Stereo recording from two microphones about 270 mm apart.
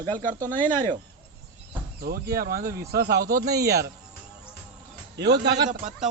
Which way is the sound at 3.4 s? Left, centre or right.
Centre.